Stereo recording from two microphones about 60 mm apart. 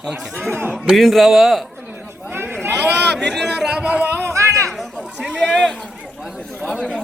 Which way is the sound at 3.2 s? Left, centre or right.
Centre.